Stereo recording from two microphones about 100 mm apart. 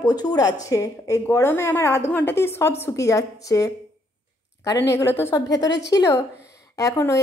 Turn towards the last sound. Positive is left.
turn(degrees=30)  # may be behind; listen again after turning